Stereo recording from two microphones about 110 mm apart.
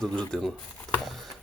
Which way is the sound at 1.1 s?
Centre (ahead or behind).